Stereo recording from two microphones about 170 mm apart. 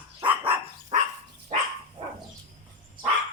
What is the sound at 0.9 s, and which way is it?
Dog, 45° right (ahead or behind).